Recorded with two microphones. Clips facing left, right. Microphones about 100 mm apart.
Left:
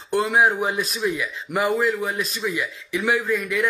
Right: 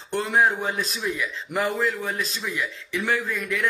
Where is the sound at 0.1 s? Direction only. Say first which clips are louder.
Left 3 dB; 5° left (ahead or behind).